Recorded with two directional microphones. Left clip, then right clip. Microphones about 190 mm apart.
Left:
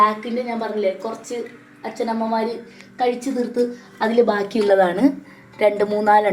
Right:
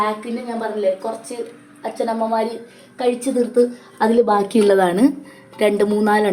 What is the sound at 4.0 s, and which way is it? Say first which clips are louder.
A woman's voice: right 2 dB; 45° right (ahead or behind).